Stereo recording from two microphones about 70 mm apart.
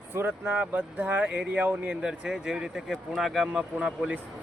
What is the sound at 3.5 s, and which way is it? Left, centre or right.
Speech, centre.